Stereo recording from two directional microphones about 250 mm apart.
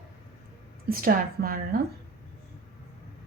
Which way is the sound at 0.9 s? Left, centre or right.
Right.